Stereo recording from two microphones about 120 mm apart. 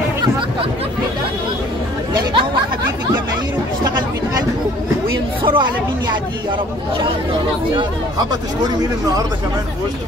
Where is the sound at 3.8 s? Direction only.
35° right (ahead or behind).